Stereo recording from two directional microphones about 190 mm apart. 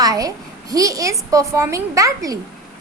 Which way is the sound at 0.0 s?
20° right (ahead or behind).